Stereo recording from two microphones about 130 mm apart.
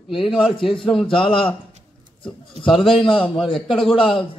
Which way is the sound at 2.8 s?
40° left (ahead or behind).